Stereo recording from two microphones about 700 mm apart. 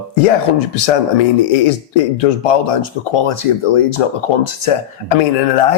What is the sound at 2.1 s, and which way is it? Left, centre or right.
Speech, left.